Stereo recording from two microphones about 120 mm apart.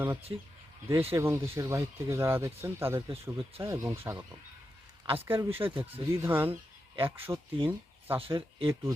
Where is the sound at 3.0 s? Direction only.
45° right (ahead or behind).